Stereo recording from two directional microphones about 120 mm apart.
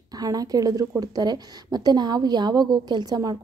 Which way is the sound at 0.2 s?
30° right (ahead or behind).